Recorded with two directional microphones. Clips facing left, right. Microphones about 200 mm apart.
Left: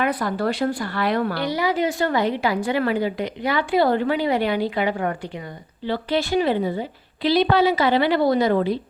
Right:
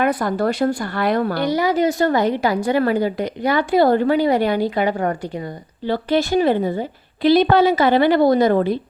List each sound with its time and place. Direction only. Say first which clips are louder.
0.0 s a woman's voice: right 4 dB; 45° right (ahead or behind)